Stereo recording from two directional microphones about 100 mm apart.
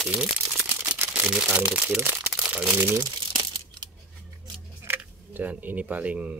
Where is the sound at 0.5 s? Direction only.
20° right (ahead or behind).